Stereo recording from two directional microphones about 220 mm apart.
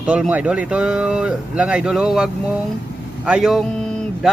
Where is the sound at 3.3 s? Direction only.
Centre (ahead or behind).